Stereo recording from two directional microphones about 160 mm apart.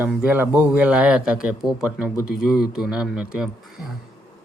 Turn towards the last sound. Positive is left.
turn(degrees=-5)  # may be behind; listen again after turning